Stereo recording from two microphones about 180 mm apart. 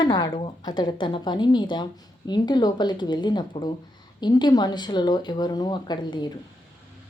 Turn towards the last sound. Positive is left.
turn(degrees=25)  # may be behind; listen again after turning